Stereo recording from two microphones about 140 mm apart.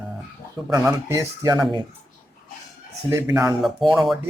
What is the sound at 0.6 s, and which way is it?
Speech, 20° right (ahead or behind).